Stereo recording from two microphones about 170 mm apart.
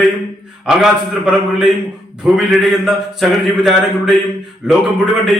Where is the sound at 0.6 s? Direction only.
5° right (ahead or behind).